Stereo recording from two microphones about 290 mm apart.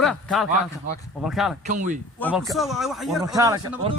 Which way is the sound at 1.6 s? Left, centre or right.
Right.